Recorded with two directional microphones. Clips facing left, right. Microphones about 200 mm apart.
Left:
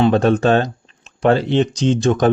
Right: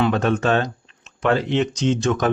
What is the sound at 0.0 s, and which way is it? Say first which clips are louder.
Speech: left 5 dB; 30° left (ahead or behind).